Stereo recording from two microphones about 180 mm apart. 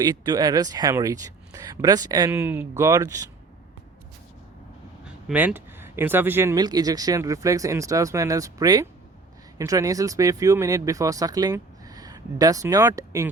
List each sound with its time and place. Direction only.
0.0 s speech: 20° right (ahead or behind)
5.3 s speech: 10° right (ahead or behind)